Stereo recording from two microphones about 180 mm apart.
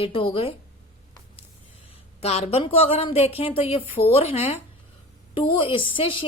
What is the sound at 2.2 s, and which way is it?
A woman's voice, 35° left (ahead or behind).